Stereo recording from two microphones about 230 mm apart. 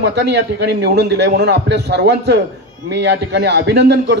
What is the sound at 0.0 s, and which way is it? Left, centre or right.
A man's voice, right.